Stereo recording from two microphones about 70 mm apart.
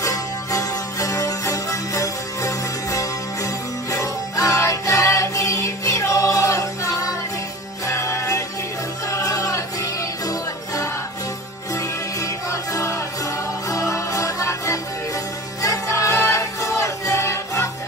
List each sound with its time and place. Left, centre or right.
0.0 s music: left